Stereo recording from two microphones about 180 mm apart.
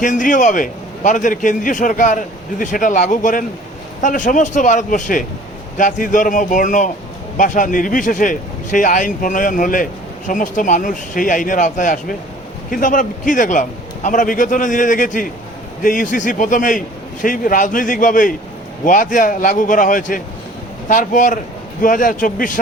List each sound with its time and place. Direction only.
0.0 s a man's voice: 45° left (ahead or behind)